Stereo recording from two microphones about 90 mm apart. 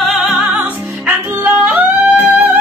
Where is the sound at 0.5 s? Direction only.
20° right (ahead or behind).